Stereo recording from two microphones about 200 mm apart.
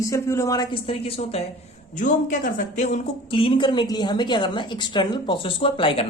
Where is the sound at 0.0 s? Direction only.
15° left (ahead or behind).